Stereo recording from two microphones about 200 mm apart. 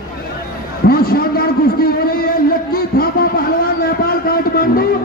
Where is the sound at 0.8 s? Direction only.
50° left (ahead or behind).